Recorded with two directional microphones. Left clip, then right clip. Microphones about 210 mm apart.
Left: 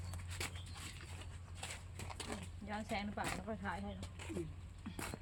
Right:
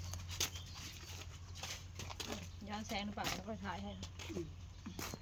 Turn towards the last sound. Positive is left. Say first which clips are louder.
# left 1 dB
turn(degrees=0)  # may be behind; listen again after turning